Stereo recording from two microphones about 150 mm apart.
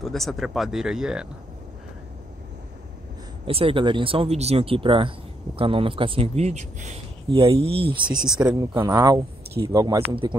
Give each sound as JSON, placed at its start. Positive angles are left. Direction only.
{"t": 0.0, "sound": "speech", "side_deg": 0}
{"t": 3.4, "sound": "speech", "side_deg": -35}
{"t": 7.2, "sound": "speech", "side_deg": -35}
{"t": 10.0, "sound": "speech", "side_deg": -35}